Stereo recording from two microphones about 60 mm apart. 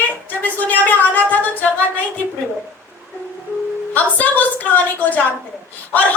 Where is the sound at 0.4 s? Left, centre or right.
Left.